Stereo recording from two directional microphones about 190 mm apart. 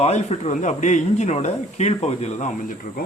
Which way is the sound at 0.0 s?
35° left (ahead or behind).